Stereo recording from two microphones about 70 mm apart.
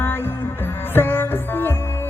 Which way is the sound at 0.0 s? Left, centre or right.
Left.